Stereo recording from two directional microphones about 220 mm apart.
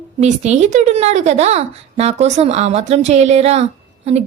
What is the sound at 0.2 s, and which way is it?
A woman's voice, 30° right (ahead or behind).